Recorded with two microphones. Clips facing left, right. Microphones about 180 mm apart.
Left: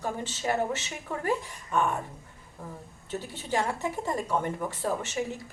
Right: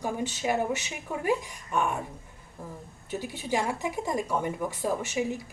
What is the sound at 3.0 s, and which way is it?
A woman's voice, 10° right (ahead or behind).